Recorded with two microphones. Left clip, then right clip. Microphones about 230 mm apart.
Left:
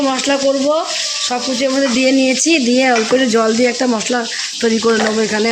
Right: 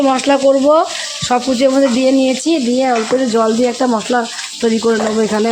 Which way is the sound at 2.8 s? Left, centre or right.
Centre.